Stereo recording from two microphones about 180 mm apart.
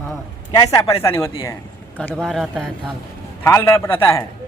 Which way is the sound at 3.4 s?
15° left (ahead or behind).